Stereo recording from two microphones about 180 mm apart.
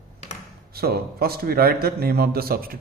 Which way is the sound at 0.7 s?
60° right (ahead or behind).